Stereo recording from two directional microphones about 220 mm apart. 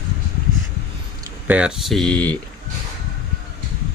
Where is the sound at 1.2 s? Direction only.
5° right (ahead or behind).